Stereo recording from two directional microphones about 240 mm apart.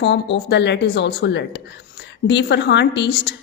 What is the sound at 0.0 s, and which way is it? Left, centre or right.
A woman's voice, left.